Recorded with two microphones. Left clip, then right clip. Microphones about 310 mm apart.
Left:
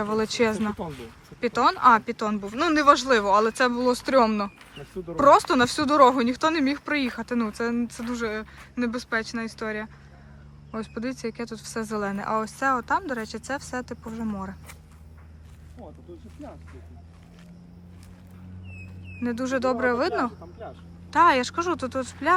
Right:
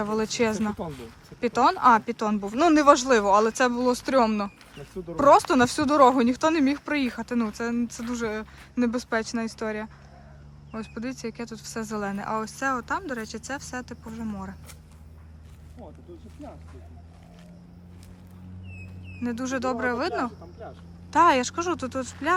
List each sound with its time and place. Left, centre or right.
0.0 s speech: centre
16.1 s speech: centre
19.2 s speech: centre
21.1 s speech: centre